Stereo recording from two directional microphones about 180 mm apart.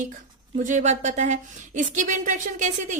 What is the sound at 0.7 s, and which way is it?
A woman's voice, 40° right (ahead or behind).